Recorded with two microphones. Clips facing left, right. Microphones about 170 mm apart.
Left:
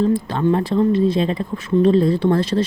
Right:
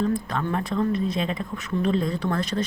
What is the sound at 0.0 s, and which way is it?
Speech, 30° left (ahead or behind).